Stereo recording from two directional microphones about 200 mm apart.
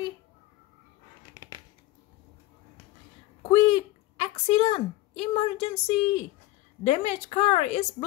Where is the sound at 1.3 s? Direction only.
20° right (ahead or behind).